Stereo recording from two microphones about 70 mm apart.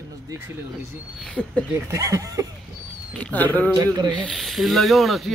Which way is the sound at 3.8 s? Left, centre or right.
Right.